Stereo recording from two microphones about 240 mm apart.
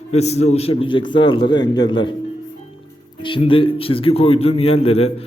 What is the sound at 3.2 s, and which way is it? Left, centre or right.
Speech, left.